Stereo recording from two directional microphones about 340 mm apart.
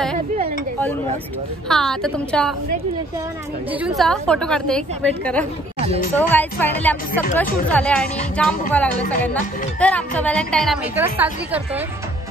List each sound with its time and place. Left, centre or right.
1.7 s a woman's voice: centre
3.8 s a woman's voice: centre